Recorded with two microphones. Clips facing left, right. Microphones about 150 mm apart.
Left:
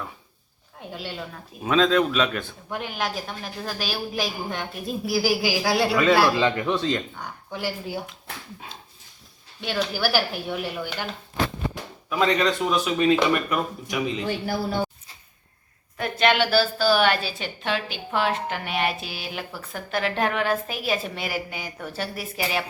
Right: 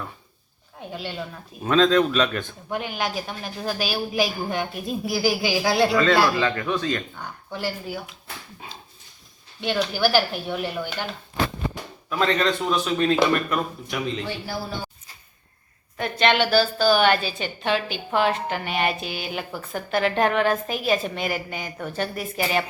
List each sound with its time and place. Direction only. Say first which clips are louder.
0.9 s a man's voice: right 2 dB; centre (ahead or behind); by 7.0 s 25° left (ahead or behind)
9.6 s a man's voice: right 3 dB; centre (ahead or behind)
12.0 s a woman's voice: even; 10° left (ahead or behind)
14.3 s a man's voice: left 4 dB; 55° left (ahead or behind)
16.0 s a man's voice: right 1 dB; 5° left (ahead or behind)